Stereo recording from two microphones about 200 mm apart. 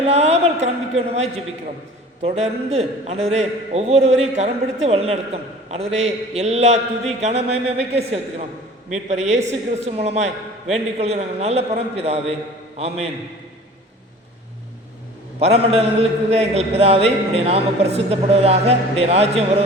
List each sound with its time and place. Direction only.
0.0 s a woman's voice: 30° right (ahead or behind)
15.4 s a man's voice: 30° right (ahead or behind)